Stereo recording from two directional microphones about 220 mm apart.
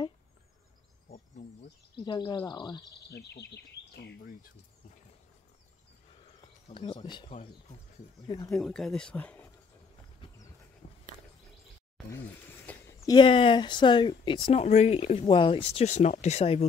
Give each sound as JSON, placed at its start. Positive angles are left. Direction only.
{"t": 2.0, "sound": "speech", "side_deg": 20}
{"t": 3.1, "sound": "speech", "side_deg": 50}
{"t": 6.7, "sound": "speech", "side_deg": 25}
{"t": 8.5, "sound": "speech", "side_deg": 0}
{"t": 10.8, "sound": "a sound", "side_deg": 25}
{"t": 12.1, "sound": "speech", "side_deg": 10}